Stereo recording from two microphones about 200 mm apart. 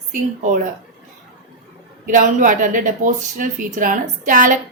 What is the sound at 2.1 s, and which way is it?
A woman's voice, 40° right (ahead or behind).